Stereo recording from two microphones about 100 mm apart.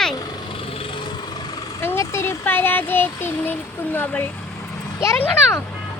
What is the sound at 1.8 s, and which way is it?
Speech, 25° left (ahead or behind).